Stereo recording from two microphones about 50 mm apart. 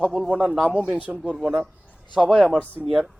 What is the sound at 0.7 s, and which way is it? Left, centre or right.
Speech, right.